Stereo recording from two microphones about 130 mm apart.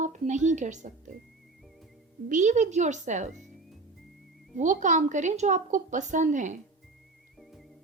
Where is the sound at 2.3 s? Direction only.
70° right (ahead or behind).